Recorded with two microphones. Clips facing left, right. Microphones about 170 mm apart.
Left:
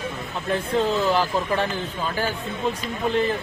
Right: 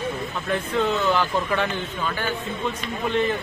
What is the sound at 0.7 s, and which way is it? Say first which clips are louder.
Speech: left 1 dB; 35° left (ahead or behind).